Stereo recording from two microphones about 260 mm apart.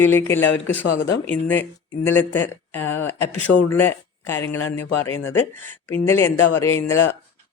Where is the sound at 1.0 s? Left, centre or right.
Centre.